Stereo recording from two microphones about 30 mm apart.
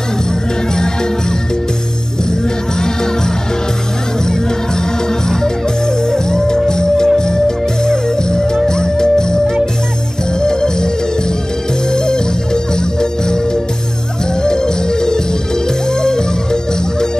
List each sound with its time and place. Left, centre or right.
6.1 s music: left
10.4 s music: left
14.4 s music: left